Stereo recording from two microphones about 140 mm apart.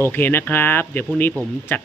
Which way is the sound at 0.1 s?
15° left (ahead or behind).